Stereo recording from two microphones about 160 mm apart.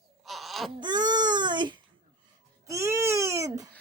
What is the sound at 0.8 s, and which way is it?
Baby cry, 25° right (ahead or behind).